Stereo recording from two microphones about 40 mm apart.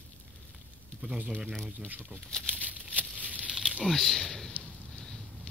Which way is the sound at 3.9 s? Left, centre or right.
Centre.